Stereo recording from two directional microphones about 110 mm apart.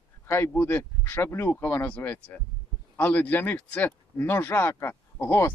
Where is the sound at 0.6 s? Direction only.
20° left (ahead or behind).